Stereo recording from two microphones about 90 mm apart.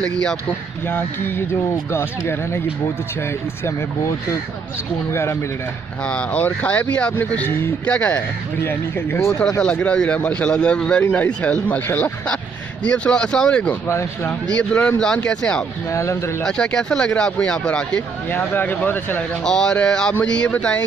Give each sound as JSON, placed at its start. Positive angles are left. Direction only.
{"t": 0.0, "sound": "speech", "side_deg": 10}
{"t": 0.8, "sound": "speech", "side_deg": 25}
{"t": 5.1, "sound": "speech", "side_deg": 30}
{"t": 6.0, "sound": "speech", "side_deg": 15}
{"t": 8.6, "sound": "speech", "side_deg": 25}
{"t": 9.6, "sound": "speech", "side_deg": 15}
{"t": 13.8, "sound": "a man's voice", "side_deg": 30}
{"t": 14.5, "sound": "speech", "side_deg": 15}
{"t": 15.9, "sound": "a man's voice", "side_deg": 35}
{"t": 16.4, "sound": "speech", "side_deg": 10}
{"t": 18.3, "sound": "speech", "side_deg": 20}
{"t": 19.4, "sound": "speech", "side_deg": 5}